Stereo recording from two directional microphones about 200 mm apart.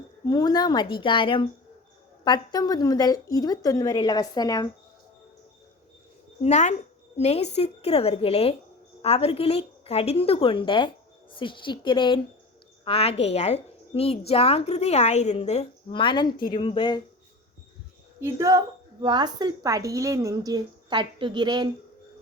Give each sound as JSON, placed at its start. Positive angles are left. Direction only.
{"t": 0.3, "sound": "a woman's voice", "side_deg": 20}
{"t": 6.4, "sound": "a woman's voice", "side_deg": 35}
{"t": 18.2, "sound": "a woman's voice", "side_deg": -15}